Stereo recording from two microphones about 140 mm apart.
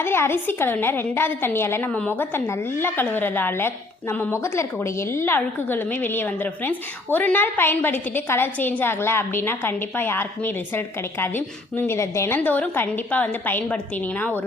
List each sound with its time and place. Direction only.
0.0 s a woman's voice: 15° left (ahead or behind)